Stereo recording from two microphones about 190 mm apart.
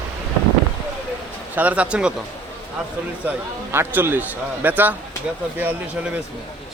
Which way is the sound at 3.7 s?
10° right (ahead or behind).